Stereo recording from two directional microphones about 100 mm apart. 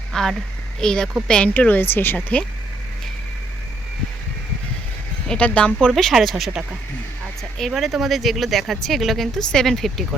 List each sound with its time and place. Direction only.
0.1 s a sound: 5° left (ahead or behind)
0.8 s speech: 5° left (ahead or behind)
5.3 s speech: 10° left (ahead or behind)
5.9 s speech: centre (ahead or behind)
7.7 s speech: centre (ahead or behind)